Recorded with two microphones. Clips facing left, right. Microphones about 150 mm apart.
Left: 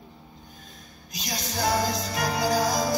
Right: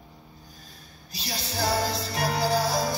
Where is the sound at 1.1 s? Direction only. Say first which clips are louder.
Left 1 dB; 30° right (ahead or behind).